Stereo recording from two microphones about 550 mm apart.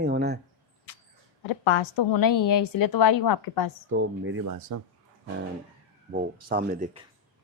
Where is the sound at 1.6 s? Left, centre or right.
Left.